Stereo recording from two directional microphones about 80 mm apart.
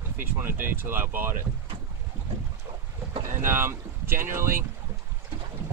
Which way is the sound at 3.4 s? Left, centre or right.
Right.